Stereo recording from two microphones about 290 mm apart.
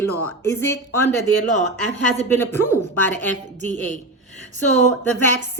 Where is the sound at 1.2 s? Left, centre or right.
Right.